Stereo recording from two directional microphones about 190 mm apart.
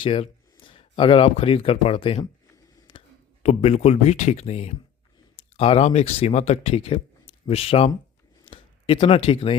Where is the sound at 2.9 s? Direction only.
30° left (ahead or behind).